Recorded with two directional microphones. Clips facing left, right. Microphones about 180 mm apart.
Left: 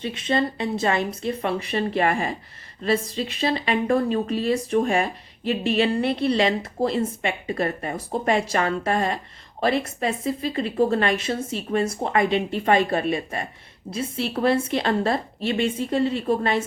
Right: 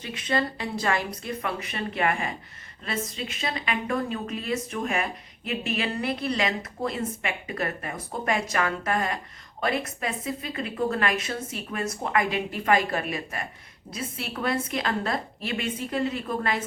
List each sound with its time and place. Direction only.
0.0 s a woman's voice: 25° left (ahead or behind)